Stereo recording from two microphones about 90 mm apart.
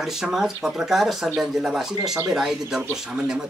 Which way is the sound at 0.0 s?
5° right (ahead or behind).